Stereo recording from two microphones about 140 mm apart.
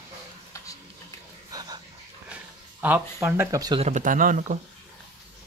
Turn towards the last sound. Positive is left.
turn(degrees=-70)  # may be behind; listen again after turning